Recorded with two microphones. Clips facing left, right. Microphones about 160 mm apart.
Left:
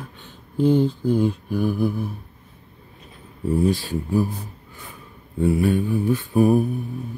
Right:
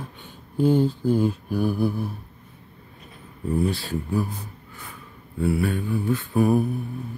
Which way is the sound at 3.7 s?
10° left (ahead or behind).